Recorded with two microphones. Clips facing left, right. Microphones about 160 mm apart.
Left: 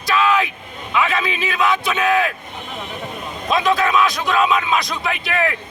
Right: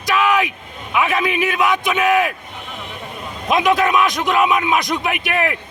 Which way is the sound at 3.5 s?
15° right (ahead or behind).